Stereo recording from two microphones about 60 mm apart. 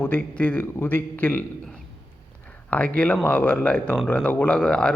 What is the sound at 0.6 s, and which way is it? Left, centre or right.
Speech, left.